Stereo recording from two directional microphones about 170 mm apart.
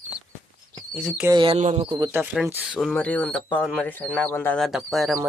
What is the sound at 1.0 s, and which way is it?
Speech, 10° right (ahead or behind).